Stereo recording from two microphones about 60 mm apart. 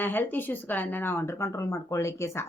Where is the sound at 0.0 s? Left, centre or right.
Left.